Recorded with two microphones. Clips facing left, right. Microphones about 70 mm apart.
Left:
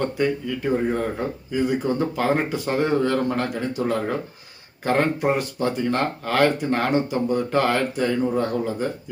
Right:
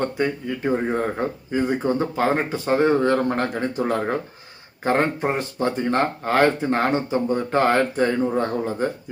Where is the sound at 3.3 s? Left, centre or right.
Right.